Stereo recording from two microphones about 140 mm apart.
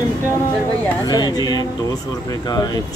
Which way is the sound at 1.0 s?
30° left (ahead or behind).